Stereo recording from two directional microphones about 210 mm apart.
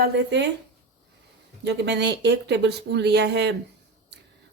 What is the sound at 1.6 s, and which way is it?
Speech, 55° right (ahead or behind).